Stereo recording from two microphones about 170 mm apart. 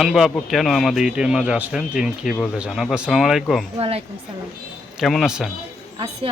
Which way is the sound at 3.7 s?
35° right (ahead or behind).